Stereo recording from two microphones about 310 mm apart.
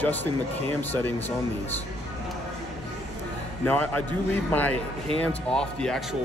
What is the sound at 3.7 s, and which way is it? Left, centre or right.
Speech, centre.